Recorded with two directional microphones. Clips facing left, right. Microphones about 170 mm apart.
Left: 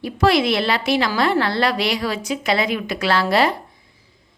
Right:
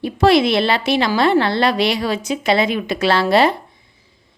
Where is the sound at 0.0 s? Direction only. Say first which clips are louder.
Right 4 dB; 25° right (ahead or behind).